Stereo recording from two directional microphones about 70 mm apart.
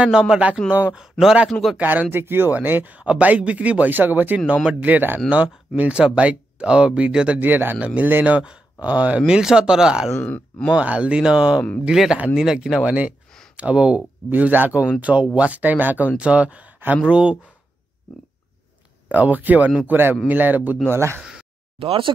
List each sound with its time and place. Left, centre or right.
0.0 s speech: centre
1.8 s speech: right
7.3 s speech: right; by 10.1 s centre
10.2 s speech: left
10.7 s speech: centre
12.8 s speech: centre
14.3 s speech: right
19.0 s speech: right
20.9 s speech: right
21.2 s a sound: centre